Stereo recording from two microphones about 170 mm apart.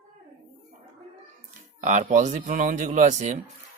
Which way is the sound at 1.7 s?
50° right (ahead or behind).